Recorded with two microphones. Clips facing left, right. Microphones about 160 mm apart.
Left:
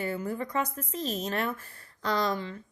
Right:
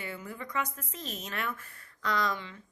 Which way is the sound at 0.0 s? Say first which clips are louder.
Left 8 dB; 40° left (ahead or behind).